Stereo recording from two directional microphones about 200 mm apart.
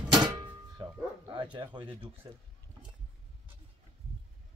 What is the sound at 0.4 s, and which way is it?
Music, 20° right (ahead or behind).